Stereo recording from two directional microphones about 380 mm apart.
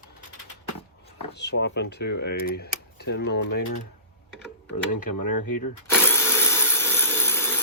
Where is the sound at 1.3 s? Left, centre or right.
Left.